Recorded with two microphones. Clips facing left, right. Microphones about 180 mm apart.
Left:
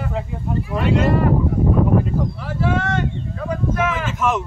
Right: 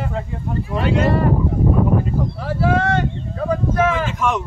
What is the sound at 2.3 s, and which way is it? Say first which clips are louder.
Speech: right 3 dB; 35° right (ahead or behind).